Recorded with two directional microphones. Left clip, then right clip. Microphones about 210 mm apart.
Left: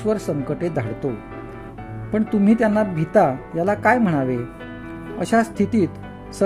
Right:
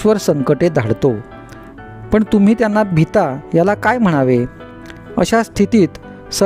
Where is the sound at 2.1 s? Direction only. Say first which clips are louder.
Right 6 dB; 55° right (ahead or behind).